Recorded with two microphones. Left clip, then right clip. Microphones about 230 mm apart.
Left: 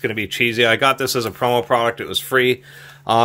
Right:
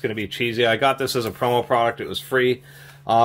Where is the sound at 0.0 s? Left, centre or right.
Left.